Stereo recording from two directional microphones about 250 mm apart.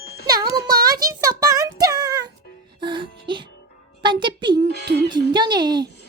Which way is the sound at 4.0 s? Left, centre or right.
Centre.